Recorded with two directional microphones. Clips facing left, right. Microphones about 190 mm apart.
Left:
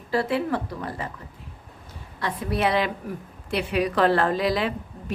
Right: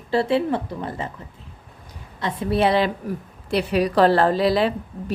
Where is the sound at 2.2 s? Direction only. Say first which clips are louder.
Right 4 dB; 25° right (ahead or behind).